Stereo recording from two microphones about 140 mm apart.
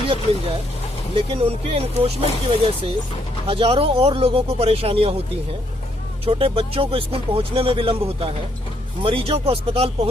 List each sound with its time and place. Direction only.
0.0 s speech: 40° right (ahead or behind)
6.2 s speech: 40° right (ahead or behind)